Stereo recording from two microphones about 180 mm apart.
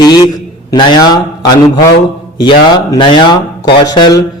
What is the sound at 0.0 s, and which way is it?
Speech, 20° left (ahead or behind).